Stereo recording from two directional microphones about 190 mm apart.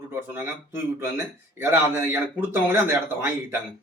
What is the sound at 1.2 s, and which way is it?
A man's voice, 10° right (ahead or behind).